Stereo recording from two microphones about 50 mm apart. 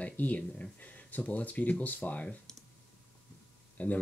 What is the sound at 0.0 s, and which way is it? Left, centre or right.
Speech, left.